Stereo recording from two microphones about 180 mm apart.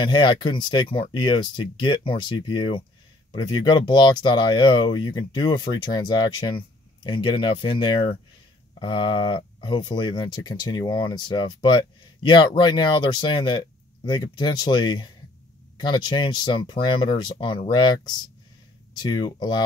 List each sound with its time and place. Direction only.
0.0 s speech: 25° left (ahead or behind)